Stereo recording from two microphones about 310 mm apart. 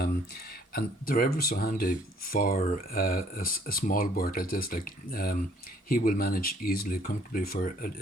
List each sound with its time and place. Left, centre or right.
0.7 s speech: left